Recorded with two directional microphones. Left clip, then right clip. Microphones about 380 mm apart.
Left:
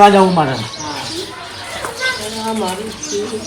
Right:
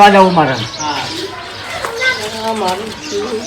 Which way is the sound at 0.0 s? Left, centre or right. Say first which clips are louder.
Right 2 dB; centre.